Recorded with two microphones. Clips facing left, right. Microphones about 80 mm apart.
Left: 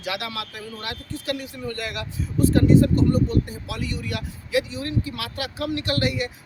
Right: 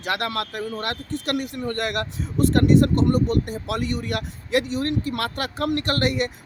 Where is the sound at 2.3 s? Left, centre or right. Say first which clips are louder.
Even; right.